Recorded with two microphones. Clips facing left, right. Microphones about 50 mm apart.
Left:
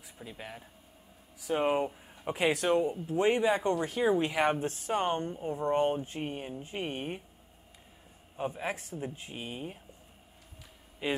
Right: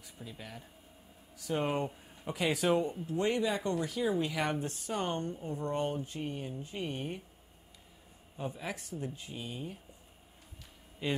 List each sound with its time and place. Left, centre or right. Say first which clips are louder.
0.2 s speech: left 3 dB; left
2.5 s speech: even; centre
3.1 s speech: left 5 dB; left
8.4 s speech: left 5 dB; left
11.0 s speech: left 2 dB; centre